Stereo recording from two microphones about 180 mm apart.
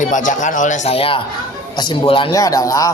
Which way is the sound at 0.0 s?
45° left (ahead or behind).